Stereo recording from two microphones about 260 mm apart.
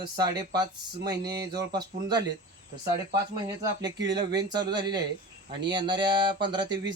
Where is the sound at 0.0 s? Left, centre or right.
Centre.